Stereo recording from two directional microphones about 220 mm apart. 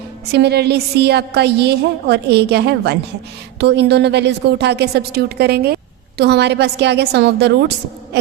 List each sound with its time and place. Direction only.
0.3 s a woman's voice: 50° right (ahead or behind)